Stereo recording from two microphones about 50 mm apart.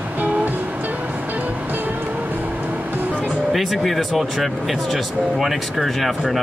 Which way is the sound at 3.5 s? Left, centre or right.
Centre.